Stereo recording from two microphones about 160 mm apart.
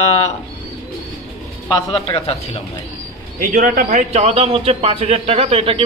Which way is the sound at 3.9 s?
45° right (ahead or behind).